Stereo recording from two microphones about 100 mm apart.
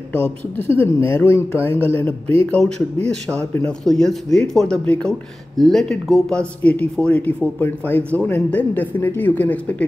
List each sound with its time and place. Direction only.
0.1 s speech: 20° left (ahead or behind); by 6.4 s centre (ahead or behind)
6.6 s speech: 15° left (ahead or behind)